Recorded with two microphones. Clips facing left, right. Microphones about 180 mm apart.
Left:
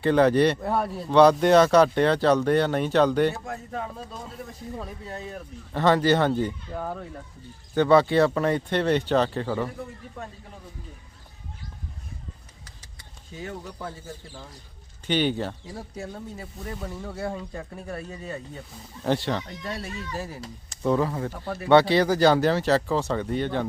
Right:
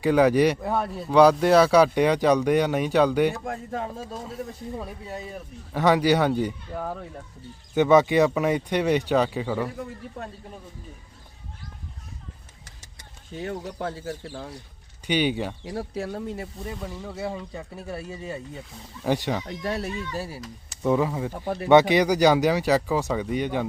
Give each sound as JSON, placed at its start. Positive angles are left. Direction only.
{"t": 0.0, "sound": "speech", "side_deg": -10}
{"t": 3.4, "sound": "speech", "side_deg": -45}
{"t": 4.8, "sound": "speech", "side_deg": -5}
{"t": 12.8, "sound": "vehicle", "side_deg": -40}
{"t": 13.7, "sound": "speech", "side_deg": -75}
{"t": 15.0, "sound": "speech", "side_deg": -10}
{"t": 15.6, "sound": "speech", "side_deg": -75}
{"t": 16.7, "sound": "speech", "side_deg": 0}
{"t": 19.5, "sound": "speech", "side_deg": -60}
{"t": 20.1, "sound": "speech", "side_deg": -10}